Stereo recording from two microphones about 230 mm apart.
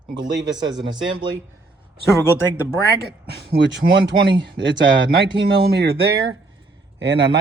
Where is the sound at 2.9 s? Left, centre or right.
Right.